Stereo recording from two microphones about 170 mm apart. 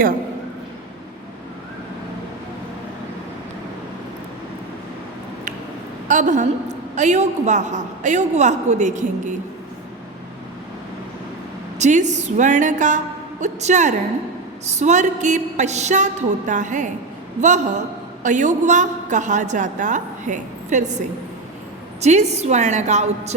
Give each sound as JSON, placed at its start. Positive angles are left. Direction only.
{"t": 6.1, "sound": "a woman's voice", "side_deg": -45}
{"t": 11.8, "sound": "a man's voice", "side_deg": -45}
{"t": 22.0, "sound": "a man's voice", "side_deg": -40}